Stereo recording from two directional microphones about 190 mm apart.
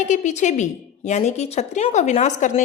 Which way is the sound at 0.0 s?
40° left (ahead or behind).